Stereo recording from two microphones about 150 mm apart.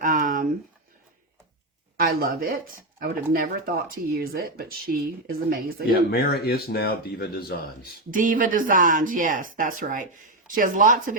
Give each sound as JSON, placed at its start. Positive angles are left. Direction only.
{"t": 0.0, "sound": "a sound", "side_deg": -65}
{"t": 2.0, "sound": "speech", "side_deg": -85}
{"t": 5.9, "sound": "speech", "side_deg": 90}
{"t": 8.1, "sound": "speech", "side_deg": -65}